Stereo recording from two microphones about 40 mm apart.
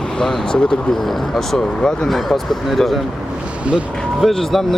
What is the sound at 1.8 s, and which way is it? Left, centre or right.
Speech, centre.